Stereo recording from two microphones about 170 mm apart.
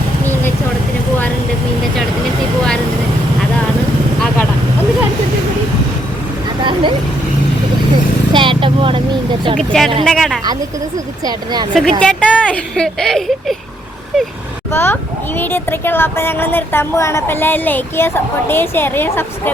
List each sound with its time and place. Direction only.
8.3 s vehicle: 30° right (ahead or behind)
9.6 s speech: centre (ahead or behind)
11.3 s speech: 25° right (ahead or behind)
11.7 s speech: 5° left (ahead or behind)
14.7 s a woman's voice: 15° left (ahead or behind)